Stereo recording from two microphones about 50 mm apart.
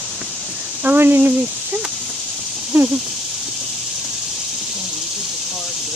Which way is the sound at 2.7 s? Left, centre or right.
Right.